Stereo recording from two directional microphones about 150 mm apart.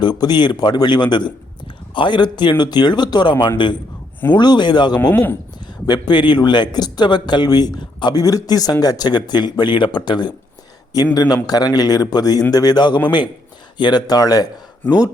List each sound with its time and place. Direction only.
0.0 s speech: 30° left (ahead or behind)
5.1 s speech: 10° left (ahead or behind)
5.8 s a man's voice: 30° left (ahead or behind)